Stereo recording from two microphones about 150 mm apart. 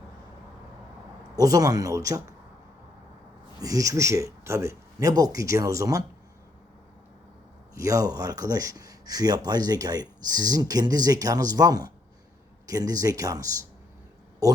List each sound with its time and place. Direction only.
1.4 s speech: 25° right (ahead or behind)
3.6 s speech: 25° right (ahead or behind)
7.8 s speech: 25° right (ahead or behind)